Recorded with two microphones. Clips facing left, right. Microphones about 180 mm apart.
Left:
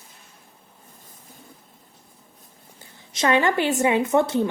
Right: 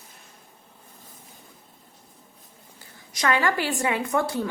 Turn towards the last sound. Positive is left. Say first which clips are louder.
# left 5 dB
turn(degrees=25)  # may be behind; listen again after turning